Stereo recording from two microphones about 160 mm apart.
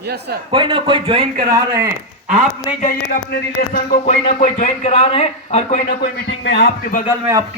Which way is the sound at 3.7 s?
65° left (ahead or behind).